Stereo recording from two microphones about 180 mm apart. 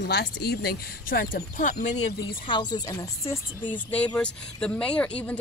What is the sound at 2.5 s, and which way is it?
Speech, 25° left (ahead or behind).